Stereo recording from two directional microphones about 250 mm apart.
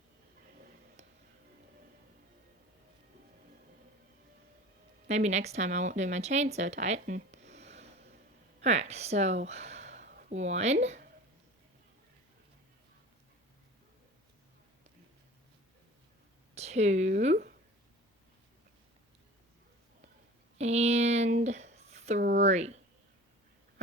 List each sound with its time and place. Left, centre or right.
5.0 s speech: right
7.5 s a sound: right
8.6 s speech: right
16.6 s speech: right
20.6 s speech: right
22.2 s speech: right
22.4 s speech: right